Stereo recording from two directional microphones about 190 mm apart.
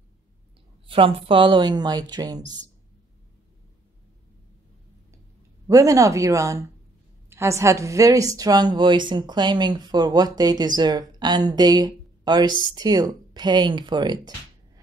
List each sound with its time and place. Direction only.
0.8 s a woman's voice: 30° right (ahead or behind)
5.7 s a woman's voice: 15° right (ahead or behind)